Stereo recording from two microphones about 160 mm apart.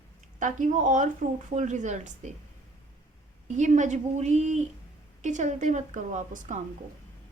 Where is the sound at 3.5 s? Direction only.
50° right (ahead or behind).